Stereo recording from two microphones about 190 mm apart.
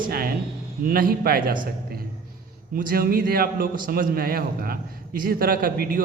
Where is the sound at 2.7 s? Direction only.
50° right (ahead or behind).